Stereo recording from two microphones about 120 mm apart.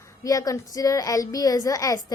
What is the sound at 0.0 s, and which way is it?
Speech, 30° left (ahead or behind).